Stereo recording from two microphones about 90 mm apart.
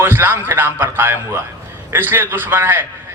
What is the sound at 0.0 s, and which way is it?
A man's voice, 25° right (ahead or behind).